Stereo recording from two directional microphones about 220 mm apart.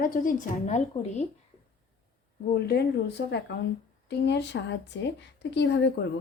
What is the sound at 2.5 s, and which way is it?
Speech, 45° left (ahead or behind).